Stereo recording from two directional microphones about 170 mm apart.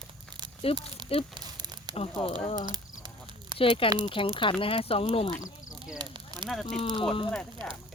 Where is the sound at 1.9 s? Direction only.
35° left (ahead or behind).